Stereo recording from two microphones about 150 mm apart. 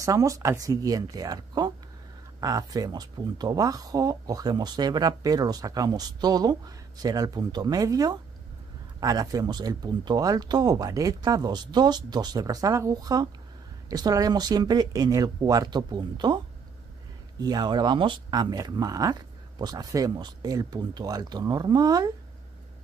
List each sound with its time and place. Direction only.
0.0 s speech: 20° right (ahead or behind)
17.4 s speech: 25° right (ahead or behind)